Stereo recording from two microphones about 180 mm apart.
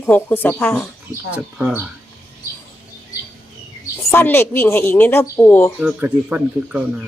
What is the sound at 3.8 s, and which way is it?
A woman's voice, 15° left (ahead or behind).